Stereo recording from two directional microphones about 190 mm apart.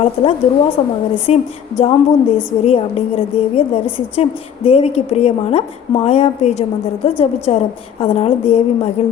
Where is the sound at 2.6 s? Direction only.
30° left (ahead or behind).